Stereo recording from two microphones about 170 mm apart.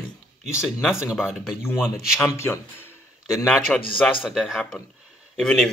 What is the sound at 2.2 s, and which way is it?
Speech, 15° left (ahead or behind).